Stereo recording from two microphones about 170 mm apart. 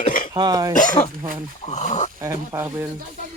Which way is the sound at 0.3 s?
25° right (ahead or behind).